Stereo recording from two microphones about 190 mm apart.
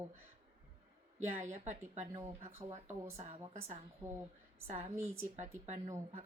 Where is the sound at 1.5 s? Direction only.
40° right (ahead or behind).